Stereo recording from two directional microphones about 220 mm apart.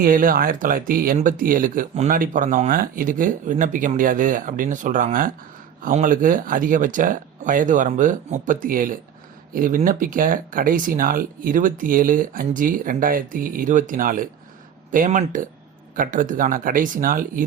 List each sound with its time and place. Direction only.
0.0 s speech: 40° right (ahead or behind)